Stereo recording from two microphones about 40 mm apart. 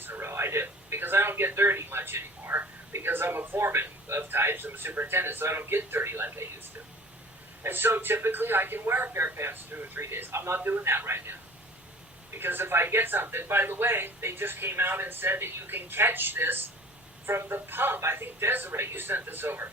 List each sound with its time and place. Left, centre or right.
0.0 s speech: right
7.6 s speech: right
9.1 s speech: right
10.0 s speech: right